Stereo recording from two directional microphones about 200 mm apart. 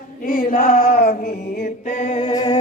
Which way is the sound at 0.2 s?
45° left (ahead or behind).